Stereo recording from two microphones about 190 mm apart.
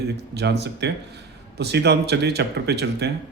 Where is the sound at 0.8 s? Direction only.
65° right (ahead or behind).